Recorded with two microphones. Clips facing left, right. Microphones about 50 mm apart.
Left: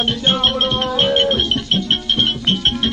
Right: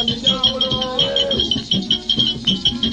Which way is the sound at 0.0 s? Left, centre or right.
Left.